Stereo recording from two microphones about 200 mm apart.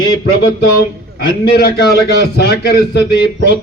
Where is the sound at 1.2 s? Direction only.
55° left (ahead or behind).